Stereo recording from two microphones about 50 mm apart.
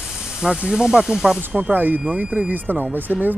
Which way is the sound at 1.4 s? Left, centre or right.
Right.